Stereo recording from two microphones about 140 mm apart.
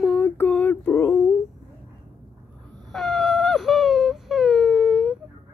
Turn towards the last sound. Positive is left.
turn(degrees=-5)  # may be behind; listen again after turning